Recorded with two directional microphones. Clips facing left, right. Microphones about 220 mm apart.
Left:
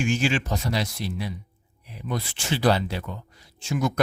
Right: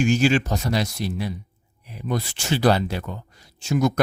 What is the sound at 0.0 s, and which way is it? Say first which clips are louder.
Speech: right 5 dB; 40° right (ahead or behind).